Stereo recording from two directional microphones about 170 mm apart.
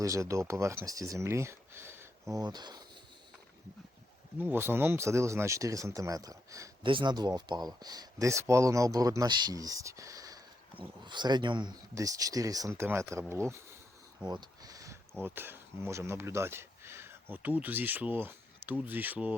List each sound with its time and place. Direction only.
0.0 s speech: 20° right (ahead or behind)
4.4 s speech: 10° right (ahead or behind)
14.3 s a sound: 25° right (ahead or behind)
15.2 s speech: 10° right (ahead or behind)